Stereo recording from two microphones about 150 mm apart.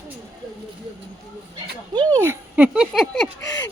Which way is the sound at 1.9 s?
25° right (ahead or behind).